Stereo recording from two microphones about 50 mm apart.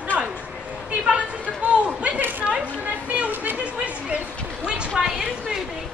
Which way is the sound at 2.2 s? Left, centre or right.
Right.